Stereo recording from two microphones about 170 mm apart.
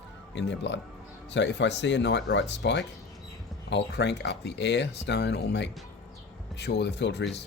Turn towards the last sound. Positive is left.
turn(degrees=90)